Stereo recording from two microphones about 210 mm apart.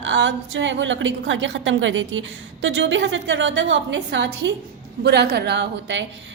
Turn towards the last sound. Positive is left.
turn(degrees=-55)  # may be behind; listen again after turning